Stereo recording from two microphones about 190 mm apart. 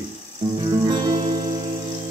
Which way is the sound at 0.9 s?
20° right (ahead or behind).